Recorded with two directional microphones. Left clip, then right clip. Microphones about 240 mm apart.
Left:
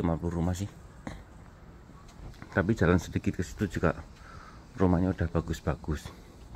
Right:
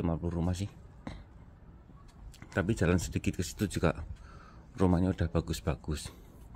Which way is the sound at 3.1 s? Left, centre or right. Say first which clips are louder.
Left 2 dB; centre.